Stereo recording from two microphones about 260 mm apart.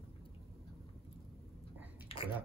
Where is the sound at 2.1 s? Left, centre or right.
Left.